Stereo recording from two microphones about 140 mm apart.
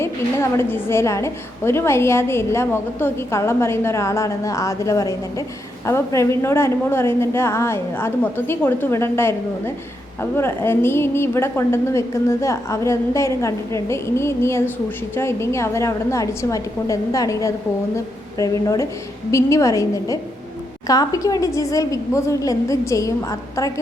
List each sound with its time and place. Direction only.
0.0 s a woman's voice: 20° left (ahead or behind)